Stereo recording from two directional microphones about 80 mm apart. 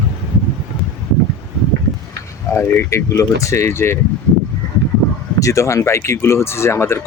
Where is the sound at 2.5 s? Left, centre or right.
Left.